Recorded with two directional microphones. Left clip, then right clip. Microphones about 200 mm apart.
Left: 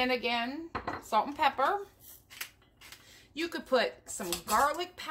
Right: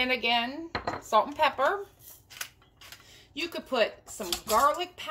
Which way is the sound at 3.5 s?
40° left (ahead or behind).